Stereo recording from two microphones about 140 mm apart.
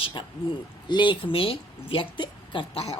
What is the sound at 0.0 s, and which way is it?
Speech, 35° left (ahead or behind).